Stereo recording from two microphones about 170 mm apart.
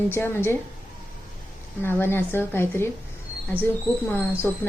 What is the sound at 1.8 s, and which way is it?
A woman's voice, 15° left (ahead or behind).